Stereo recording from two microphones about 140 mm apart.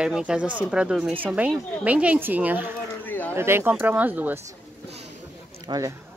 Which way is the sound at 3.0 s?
10° left (ahead or behind).